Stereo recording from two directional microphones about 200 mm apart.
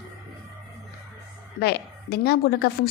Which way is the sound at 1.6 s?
55° left (ahead or behind).